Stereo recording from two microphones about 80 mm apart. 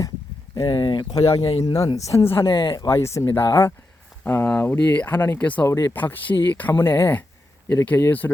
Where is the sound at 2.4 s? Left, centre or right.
Left.